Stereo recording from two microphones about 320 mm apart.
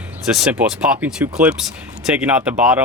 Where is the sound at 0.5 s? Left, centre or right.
Centre.